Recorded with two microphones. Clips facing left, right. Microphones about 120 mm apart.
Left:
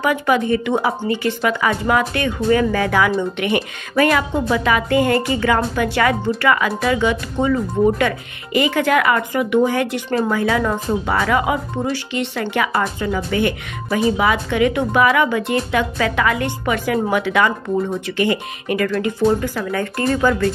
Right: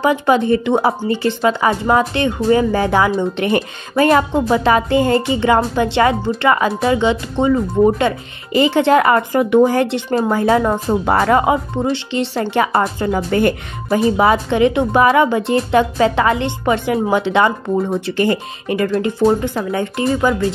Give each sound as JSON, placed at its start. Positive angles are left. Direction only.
{"t": 0.0, "sound": "speech", "side_deg": -30}